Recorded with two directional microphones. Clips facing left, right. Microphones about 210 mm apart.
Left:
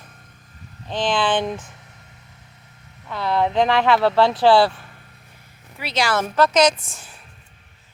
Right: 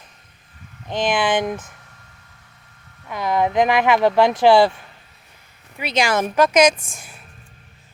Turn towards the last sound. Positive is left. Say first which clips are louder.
# right 2 dB
turn(degrees=-10)  # may be behind; listen again after turning